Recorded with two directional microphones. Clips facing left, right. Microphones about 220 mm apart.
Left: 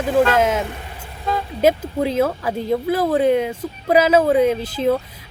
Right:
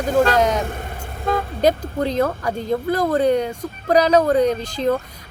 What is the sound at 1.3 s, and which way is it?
Vehicle, 50° right (ahead or behind).